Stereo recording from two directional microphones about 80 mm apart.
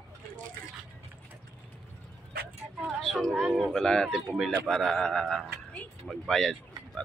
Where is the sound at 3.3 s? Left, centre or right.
Centre.